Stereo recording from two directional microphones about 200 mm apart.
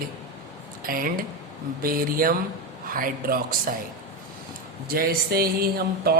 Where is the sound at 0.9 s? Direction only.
45° right (ahead or behind).